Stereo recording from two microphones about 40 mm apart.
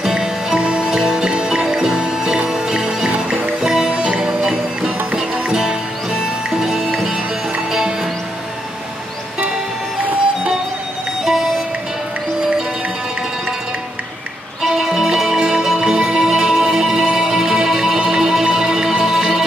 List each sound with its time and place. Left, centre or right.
0.0 s music: centre
0.6 s music: right
0.8 s music: centre
11.2 s music: centre
14.6 s music: centre